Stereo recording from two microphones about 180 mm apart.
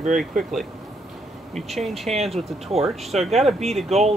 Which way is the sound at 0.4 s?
Centre (ahead or behind).